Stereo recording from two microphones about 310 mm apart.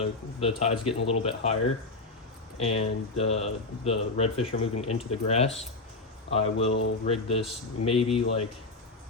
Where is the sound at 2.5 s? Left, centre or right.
Centre.